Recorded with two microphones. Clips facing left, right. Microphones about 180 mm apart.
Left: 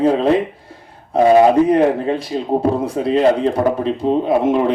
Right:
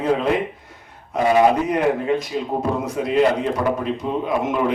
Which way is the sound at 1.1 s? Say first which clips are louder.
Left 5 dB; 30° left (ahead or behind).